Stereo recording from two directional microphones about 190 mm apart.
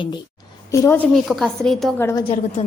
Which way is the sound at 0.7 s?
15° left (ahead or behind).